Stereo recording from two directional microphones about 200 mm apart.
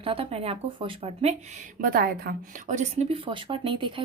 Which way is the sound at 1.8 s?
50° right (ahead or behind).